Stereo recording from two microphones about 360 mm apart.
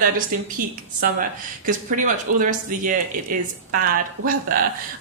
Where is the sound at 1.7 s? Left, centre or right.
Right.